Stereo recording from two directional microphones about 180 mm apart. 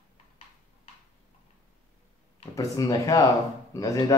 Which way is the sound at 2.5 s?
20° left (ahead or behind).